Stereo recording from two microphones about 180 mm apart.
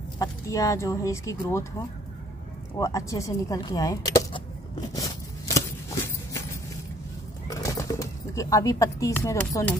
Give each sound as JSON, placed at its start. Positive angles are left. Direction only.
{"t": 0.2, "sound": "speech", "side_deg": 20}
{"t": 2.8, "sound": "speech", "side_deg": 20}
{"t": 4.9, "sound": "scissors", "side_deg": 20}
{"t": 7.4, "sound": "bird", "side_deg": 20}